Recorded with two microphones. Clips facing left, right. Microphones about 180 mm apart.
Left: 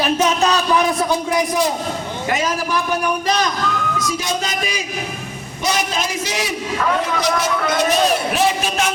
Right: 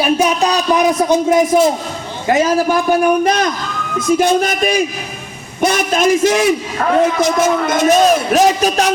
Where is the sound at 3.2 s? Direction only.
55° right (ahead or behind).